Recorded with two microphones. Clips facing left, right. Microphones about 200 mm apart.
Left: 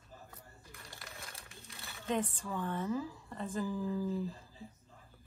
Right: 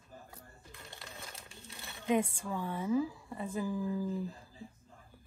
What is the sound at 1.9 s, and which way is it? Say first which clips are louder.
A woman's voice: right 4 dB; 15° right (ahead or behind).